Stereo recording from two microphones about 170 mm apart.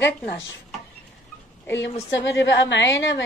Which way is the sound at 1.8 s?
90° left.